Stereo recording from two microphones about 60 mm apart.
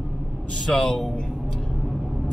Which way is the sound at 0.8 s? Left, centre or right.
Centre.